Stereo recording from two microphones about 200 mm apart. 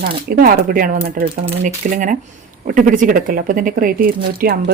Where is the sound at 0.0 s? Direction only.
45° right (ahead or behind).